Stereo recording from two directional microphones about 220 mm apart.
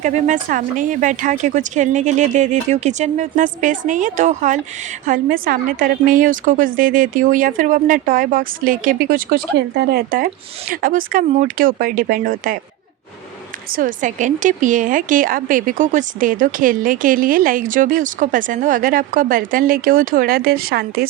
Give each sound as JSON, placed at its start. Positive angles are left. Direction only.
{"t": 0.0, "sound": "speech", "side_deg": -35}
{"t": 13.7, "sound": "speech", "side_deg": -40}